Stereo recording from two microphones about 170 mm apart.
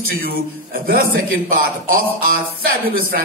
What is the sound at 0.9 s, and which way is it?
Speech, 60° right (ahead or behind).